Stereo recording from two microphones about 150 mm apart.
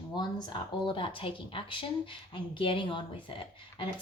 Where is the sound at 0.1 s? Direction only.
30° left (ahead or behind).